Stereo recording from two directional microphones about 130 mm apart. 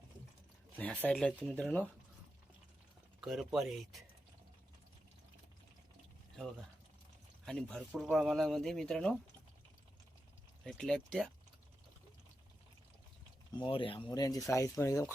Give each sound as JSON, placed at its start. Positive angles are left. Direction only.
{"t": 1.0, "sound": "speech", "side_deg": 5}
{"t": 3.2, "sound": "speech", "side_deg": 0}
{"t": 6.3, "sound": "speech", "side_deg": 0}
{"t": 10.6, "sound": "speech", "side_deg": 5}
{"t": 13.5, "sound": "speech", "side_deg": 40}
{"t": 14.1, "sound": "speech", "side_deg": 25}